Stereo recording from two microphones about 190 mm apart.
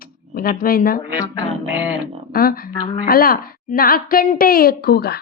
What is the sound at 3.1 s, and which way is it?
A woman's voice, 50° left (ahead or behind).